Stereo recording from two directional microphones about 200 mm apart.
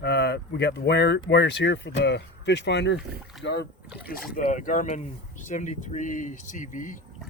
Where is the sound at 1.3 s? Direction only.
60° left (ahead or behind).